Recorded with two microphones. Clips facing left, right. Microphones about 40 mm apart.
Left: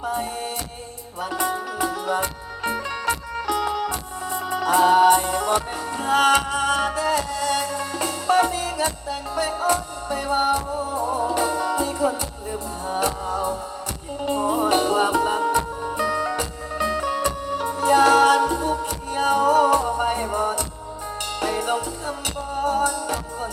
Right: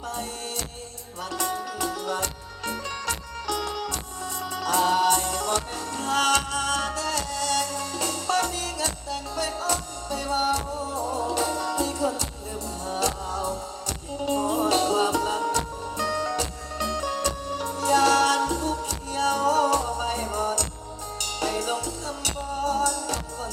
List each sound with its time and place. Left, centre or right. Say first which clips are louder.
0.0 s music: left 6 dB; centre